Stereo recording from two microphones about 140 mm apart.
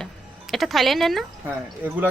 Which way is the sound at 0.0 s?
Centre (ahead or behind).